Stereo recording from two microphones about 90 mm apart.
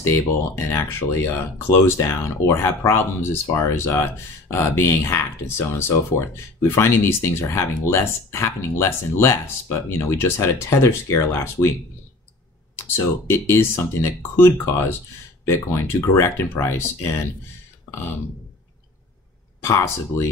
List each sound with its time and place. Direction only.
0.6 s speech: 30° left (ahead or behind)
12.7 s speech: 30° left (ahead or behind)
19.6 s speech: 35° left (ahead or behind)